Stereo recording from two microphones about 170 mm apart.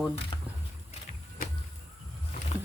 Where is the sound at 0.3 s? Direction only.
30° left (ahead or behind).